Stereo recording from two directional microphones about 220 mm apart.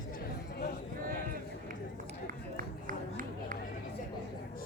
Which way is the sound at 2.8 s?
35° right (ahead or behind).